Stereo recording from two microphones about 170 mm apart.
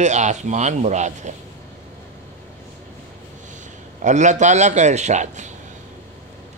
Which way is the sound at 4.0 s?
45° right (ahead or behind).